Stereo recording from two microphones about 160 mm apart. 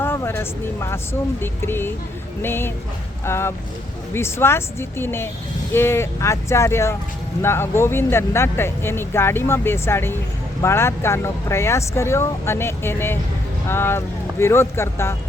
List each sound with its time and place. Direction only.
0.0 s speech: 15° left (ahead or behind)